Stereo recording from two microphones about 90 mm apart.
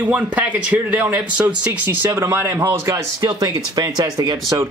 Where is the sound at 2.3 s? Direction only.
25° right (ahead or behind).